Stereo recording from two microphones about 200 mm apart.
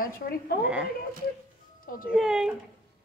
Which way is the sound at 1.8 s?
45° left (ahead or behind).